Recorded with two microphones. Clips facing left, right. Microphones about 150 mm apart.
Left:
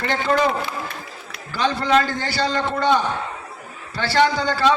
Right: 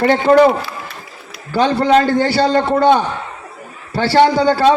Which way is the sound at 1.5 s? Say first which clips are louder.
Right 6 dB; 50° right (ahead or behind).